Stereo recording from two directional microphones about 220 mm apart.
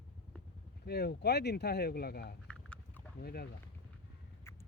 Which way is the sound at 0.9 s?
45° left (ahead or behind).